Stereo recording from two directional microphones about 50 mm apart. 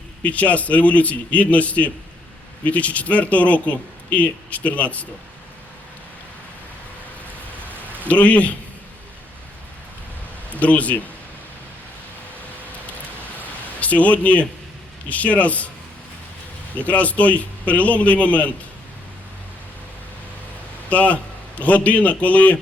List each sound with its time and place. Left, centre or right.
0.2 s speech: left
8.0 s speech: left
10.6 s speech: left
13.7 s speech: left
16.7 s speech: left
20.9 s speech: left